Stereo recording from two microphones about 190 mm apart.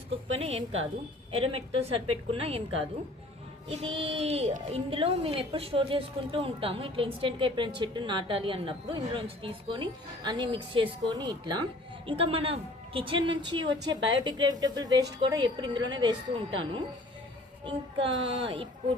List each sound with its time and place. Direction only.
0.4 s a woman's voice: 90° right
1.3 s a woman's voice: 30° right (ahead or behind)